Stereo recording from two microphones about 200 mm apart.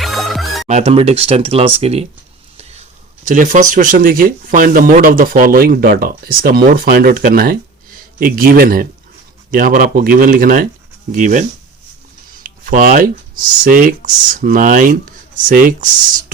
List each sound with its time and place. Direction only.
0.0 s music: centre (ahead or behind)
0.7 s speech: 30° right (ahead or behind)
3.2 s speech: 40° right (ahead or behind)